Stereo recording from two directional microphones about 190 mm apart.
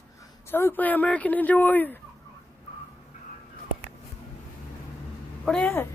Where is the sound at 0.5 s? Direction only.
10° left (ahead or behind).